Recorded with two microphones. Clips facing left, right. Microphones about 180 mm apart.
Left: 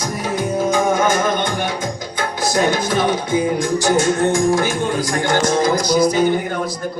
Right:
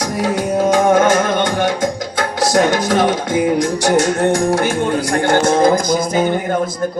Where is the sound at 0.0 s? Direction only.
80° right; by 6.7 s 50° right (ahead or behind).